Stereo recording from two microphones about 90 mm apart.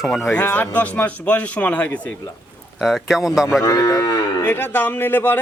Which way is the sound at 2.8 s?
Centre (ahead or behind).